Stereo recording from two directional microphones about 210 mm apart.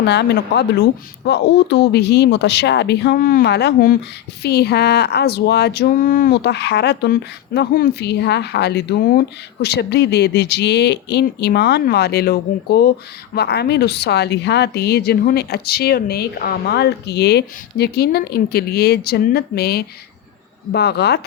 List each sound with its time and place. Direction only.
0.0 s speech: 55° left (ahead or behind)